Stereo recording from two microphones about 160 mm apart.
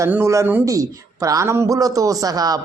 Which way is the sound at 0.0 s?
15° right (ahead or behind).